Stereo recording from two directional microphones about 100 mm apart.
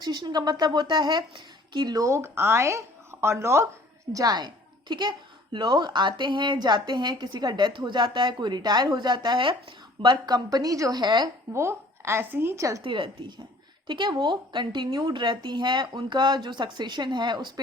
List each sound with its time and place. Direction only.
0.0 s a woman's voice: 45° right (ahead or behind); by 3.7 s 30° right (ahead or behind)
4.1 s a woman's voice: 40° right (ahead or behind)
11.0 s a woman's voice: 45° right (ahead or behind)
11.5 s a woman's voice: 25° right (ahead or behind)
12.8 s a woman's voice: 60° right (ahead or behind)